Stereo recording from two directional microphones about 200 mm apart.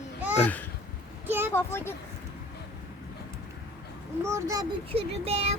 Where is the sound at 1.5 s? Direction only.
10° left (ahead or behind).